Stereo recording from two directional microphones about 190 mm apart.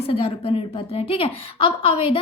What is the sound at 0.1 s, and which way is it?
A woman's voice, 30° left (ahead or behind).